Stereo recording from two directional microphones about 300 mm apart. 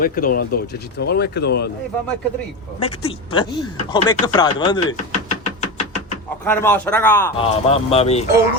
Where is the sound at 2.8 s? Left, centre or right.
Centre.